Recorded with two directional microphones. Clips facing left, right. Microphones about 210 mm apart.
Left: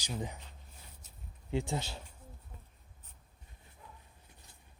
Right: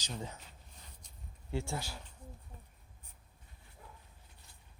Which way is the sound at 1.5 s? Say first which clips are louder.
Left 3 dB; 15° left (ahead or behind).